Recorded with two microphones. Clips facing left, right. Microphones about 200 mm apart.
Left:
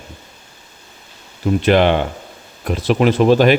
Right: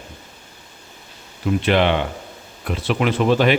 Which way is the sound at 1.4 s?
40° left (ahead or behind).